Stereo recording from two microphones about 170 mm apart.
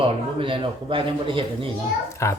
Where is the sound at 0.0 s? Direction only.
30° right (ahead or behind).